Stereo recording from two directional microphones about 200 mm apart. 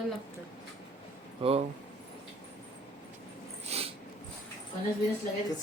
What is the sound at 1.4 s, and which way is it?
Speech, 30° right (ahead or behind).